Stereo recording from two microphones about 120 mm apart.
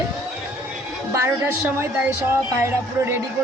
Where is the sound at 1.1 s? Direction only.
25° right (ahead or behind).